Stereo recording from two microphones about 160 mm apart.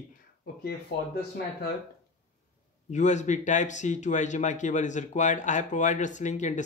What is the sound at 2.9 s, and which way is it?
Speech, 50° left (ahead or behind).